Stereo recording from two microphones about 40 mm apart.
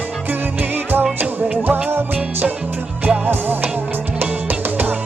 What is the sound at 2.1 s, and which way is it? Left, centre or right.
Music, right.